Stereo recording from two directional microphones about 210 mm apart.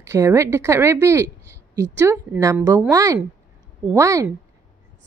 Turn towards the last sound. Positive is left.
turn(degrees=-15)  # may be behind; listen again after turning